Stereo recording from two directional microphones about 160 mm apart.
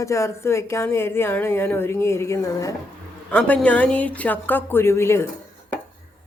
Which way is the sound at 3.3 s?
5° left (ahead or behind).